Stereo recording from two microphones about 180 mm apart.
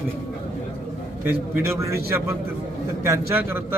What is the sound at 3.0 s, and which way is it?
Speech, 15° right (ahead or behind).